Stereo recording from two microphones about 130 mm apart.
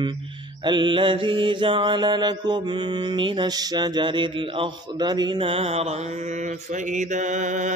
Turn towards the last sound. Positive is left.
turn(degrees=-70)  # may be behind; listen again after turning